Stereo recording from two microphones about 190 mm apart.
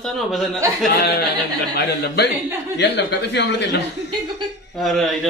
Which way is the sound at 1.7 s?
60° left (ahead or behind).